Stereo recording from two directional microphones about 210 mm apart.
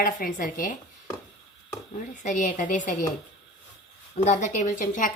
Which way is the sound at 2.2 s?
35° left (ahead or behind).